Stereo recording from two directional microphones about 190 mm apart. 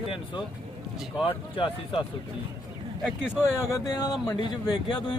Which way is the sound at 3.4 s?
15° left (ahead or behind).